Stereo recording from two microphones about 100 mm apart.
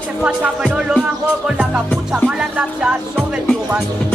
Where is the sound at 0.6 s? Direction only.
5° right (ahead or behind).